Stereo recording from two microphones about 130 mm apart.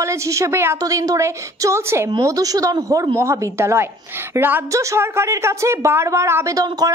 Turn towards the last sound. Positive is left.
turn(degrees=-30)  # may be behind; listen again after turning